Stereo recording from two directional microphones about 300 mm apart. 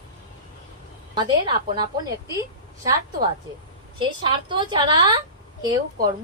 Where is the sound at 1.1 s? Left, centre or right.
Centre.